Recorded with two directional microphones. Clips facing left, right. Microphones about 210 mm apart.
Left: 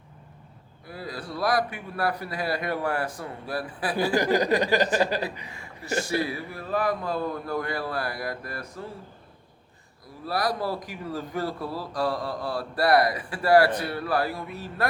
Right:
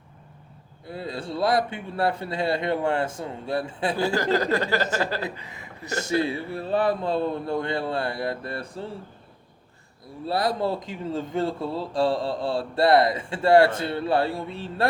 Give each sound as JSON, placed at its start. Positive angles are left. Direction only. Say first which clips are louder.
{"t": 0.9, "sound": "speech", "louder": "right 4 dB", "side_deg": -25}
{"t": 4.1, "sound": "speech", "louder": "left 4 dB", "side_deg": 15}
{"t": 5.5, "sound": "speech", "louder": "left 2 dB", "side_deg": -20}
{"t": 10.2, "sound": "speech", "louder": "right 3 dB", "side_deg": -25}